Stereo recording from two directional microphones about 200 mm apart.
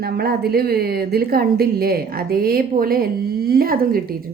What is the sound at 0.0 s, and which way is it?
A woman's voice, 50° right (ahead or behind).